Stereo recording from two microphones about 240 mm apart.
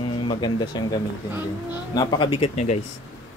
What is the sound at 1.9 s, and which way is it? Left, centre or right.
Speech, centre.